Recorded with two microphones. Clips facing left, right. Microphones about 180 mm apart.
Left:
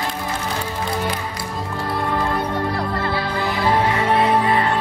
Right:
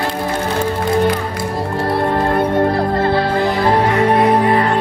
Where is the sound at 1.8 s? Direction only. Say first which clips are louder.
Right 6 dB; 65° right (ahead or behind); by 4.4 s 45° right (ahead or behind).